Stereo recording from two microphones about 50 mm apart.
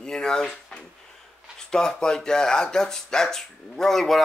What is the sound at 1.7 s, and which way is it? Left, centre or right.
Speech, centre.